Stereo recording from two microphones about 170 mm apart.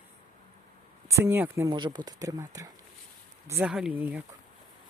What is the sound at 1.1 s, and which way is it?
Speech, 15° right (ahead or behind).